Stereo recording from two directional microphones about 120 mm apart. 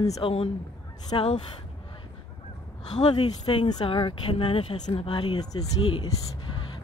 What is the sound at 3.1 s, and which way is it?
Speech, 40° left (ahead or behind).